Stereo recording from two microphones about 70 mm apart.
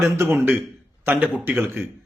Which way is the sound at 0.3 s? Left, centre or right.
Right.